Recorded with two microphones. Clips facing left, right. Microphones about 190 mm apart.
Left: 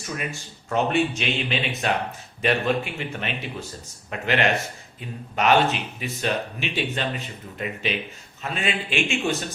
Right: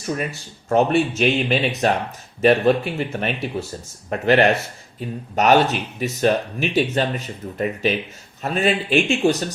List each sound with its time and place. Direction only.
0.3 s a man's voice: 45° right (ahead or behind)